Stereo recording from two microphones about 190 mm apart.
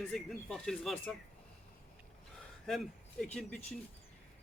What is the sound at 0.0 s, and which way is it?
Speech, 5° left (ahead or behind).